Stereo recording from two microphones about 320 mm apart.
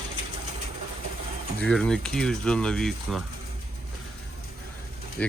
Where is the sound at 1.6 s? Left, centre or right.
Centre.